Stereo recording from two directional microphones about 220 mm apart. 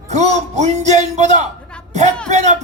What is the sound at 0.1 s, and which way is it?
A man's voice, 30° right (ahead or behind).